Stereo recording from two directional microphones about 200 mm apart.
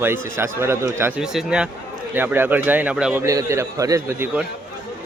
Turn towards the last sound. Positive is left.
turn(degrees=-10)  # may be behind; listen again after turning